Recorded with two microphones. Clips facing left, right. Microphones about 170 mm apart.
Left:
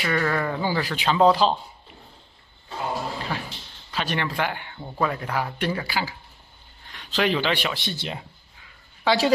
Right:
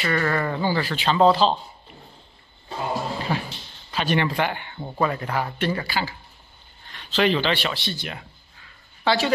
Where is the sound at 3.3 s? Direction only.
25° right (ahead or behind).